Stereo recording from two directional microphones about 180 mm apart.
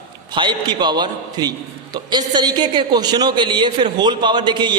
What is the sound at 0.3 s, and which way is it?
A man's voice, 25° right (ahead or behind).